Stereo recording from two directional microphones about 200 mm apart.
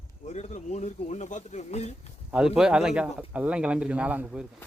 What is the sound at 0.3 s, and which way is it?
Speech, 35° left (ahead or behind).